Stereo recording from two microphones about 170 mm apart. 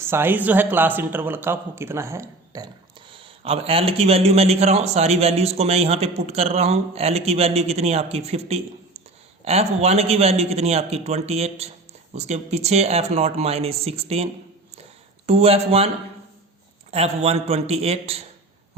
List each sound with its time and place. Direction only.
0.0 s a man's voice: 15° right (ahead or behind)
3.1 s a man's voice: 30° right (ahead or behind)
15.3 s a man's voice: 35° right (ahead or behind)
16.9 s a man's voice: 35° right (ahead or behind)